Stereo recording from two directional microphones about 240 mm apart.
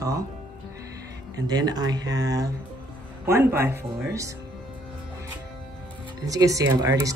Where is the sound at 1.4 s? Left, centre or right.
Centre.